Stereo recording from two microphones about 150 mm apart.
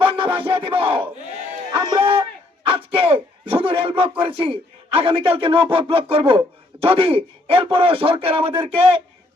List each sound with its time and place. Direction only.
0.0 s music: 35° right (ahead or behind)
0.3 s battle cry: 35° right (ahead or behind)
1.7 s a man's voice: 30° right (ahead or behind)